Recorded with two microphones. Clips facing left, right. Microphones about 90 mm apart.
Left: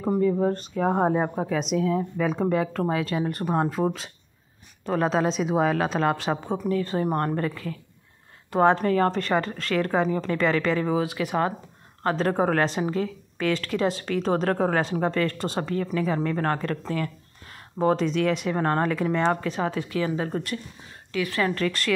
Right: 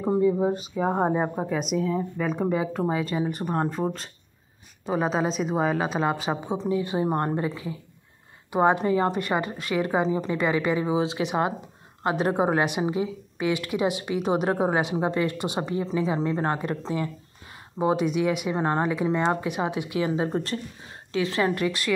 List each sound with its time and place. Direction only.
0.1 s speech: 15° right (ahead or behind)
6.7 s a woman's voice: 15° right (ahead or behind)
11.0 s a woman's voice: 25° right (ahead or behind)